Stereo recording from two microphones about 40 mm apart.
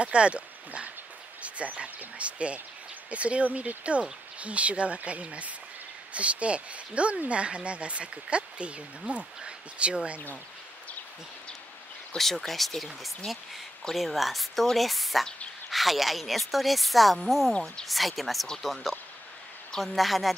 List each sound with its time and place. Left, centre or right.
0.0 s speech: right
12.2 s a woman's voice: centre
17.5 s speech: centre
17.8 s a woman's voice: centre